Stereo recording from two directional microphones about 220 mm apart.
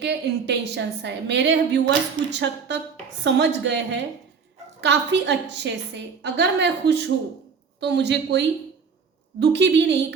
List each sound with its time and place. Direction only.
0.0 s a woman's voice: 50° right (ahead or behind)